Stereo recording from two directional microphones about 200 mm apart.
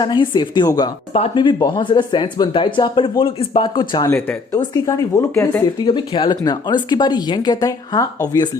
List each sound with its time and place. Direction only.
0.0 s speech: 25° left (ahead or behind)